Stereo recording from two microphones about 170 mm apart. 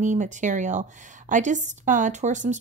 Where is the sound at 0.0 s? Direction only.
45° right (ahead or behind).